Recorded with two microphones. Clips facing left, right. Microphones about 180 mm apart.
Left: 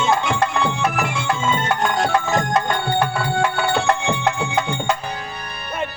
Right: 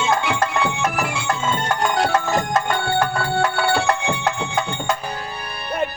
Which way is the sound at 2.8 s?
20° left (ahead or behind).